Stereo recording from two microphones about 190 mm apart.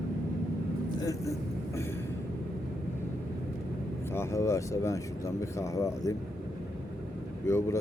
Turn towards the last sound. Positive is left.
turn(degrees=15)  # may be behind; listen again after turning